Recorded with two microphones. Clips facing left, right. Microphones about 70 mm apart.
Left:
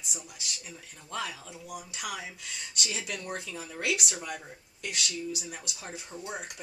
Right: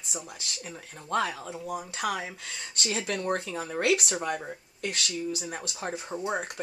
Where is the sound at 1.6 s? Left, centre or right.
Right.